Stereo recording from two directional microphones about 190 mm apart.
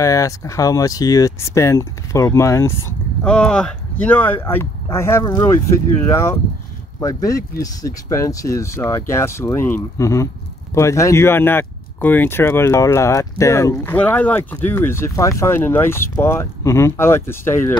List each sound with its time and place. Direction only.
0.0 s speech: 15° left (ahead or behind)